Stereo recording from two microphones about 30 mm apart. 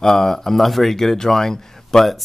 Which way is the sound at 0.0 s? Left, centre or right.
Centre.